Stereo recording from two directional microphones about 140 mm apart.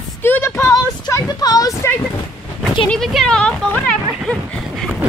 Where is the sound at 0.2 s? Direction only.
15° left (ahead or behind).